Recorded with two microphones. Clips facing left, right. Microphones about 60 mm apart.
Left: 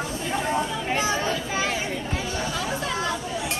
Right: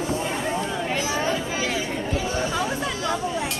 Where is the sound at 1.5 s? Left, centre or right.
Left.